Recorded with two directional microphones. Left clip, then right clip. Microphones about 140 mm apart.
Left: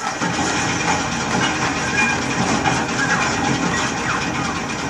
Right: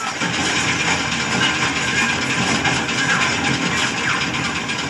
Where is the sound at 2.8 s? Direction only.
30° right (ahead or behind).